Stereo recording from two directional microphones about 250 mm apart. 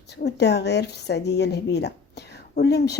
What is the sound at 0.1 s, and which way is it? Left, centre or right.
A woman's voice, left.